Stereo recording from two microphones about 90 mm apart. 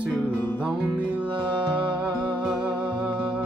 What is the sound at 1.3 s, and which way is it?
Music, 70° right (ahead or behind).